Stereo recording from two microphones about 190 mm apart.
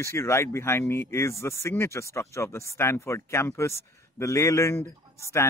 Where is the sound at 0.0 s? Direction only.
15° left (ahead or behind).